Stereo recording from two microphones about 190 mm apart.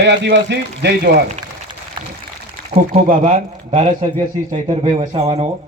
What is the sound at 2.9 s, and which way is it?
Speech, 35° right (ahead or behind).